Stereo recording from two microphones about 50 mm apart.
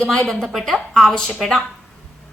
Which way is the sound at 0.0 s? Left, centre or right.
Centre.